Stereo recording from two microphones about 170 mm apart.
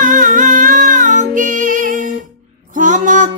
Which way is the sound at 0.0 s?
50° right (ahead or behind).